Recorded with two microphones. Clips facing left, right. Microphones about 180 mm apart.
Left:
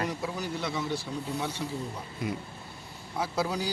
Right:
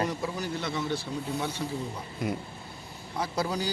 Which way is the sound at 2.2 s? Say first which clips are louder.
Right 2 dB; 45° right (ahead or behind).